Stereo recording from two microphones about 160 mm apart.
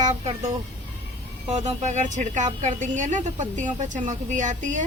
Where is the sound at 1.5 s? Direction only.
45° right (ahead or behind).